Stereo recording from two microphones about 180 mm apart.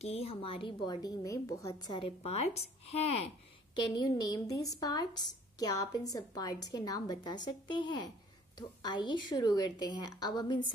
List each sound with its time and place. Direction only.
0.0 s a woman's voice: 35° left (ahead or behind)
3.7 s a woman's voice: 25° left (ahead or behind)